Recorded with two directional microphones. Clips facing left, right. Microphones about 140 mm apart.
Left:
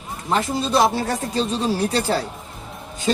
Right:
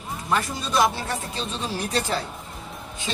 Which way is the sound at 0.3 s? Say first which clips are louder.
Left 5 dB; 25° left (ahead or behind).